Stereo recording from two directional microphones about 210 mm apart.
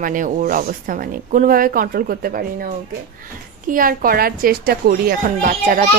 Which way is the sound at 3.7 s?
40° right (ahead or behind).